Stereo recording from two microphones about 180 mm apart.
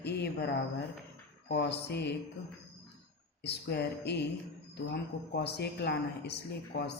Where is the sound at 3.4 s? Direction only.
70° left (ahead or behind).